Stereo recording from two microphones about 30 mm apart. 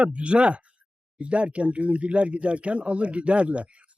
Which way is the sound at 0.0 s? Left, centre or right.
Right.